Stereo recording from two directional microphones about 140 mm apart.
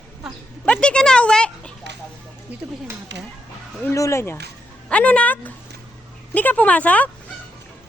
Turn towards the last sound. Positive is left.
turn(degrees=10)  # may be behind; listen again after turning